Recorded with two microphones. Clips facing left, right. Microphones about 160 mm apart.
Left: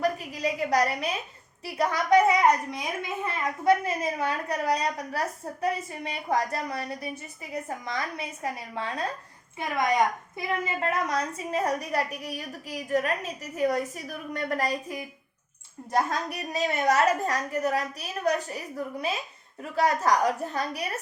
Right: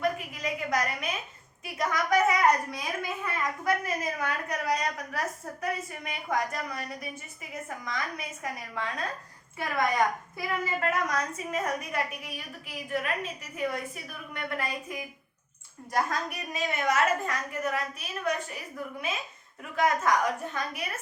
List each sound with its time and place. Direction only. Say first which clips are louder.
0.0 s a sound: left 3 dB; 35° left (ahead or behind)
1.6 s a woman's voice: left 3 dB; 30° left (ahead or behind)
9.6 s a woman's voice: left 2 dB; 20° left (ahead or behind); by 18.6 s 40° left (ahead or behind)
19.7 s a woman's voice: left 2 dB; 35° left (ahead or behind)